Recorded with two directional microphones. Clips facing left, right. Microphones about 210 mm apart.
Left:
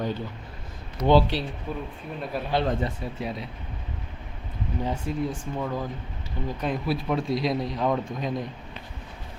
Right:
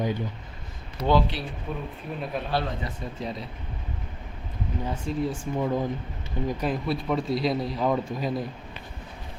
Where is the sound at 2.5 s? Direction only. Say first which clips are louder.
Left 6 dB; 25° left (ahead or behind).